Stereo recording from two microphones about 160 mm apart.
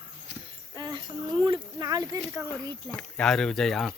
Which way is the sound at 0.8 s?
30° right (ahead or behind).